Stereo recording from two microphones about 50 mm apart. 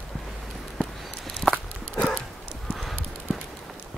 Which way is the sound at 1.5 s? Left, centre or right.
Left.